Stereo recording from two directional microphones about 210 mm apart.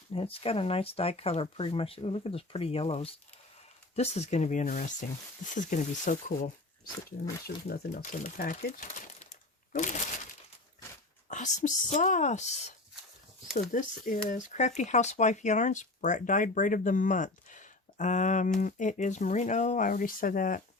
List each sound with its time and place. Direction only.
0.1 s speech: 25° left (ahead or behind)
11.3 s speech: 35° left (ahead or behind)
13.5 s speech: 40° left (ahead or behind)